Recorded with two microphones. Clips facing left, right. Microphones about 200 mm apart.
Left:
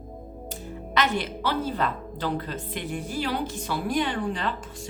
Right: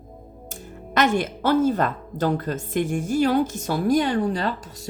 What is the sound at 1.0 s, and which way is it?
A woman's voice, 45° right (ahead or behind).